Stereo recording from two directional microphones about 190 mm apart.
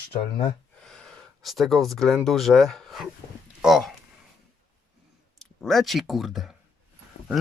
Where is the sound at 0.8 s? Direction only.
5° left (ahead or behind).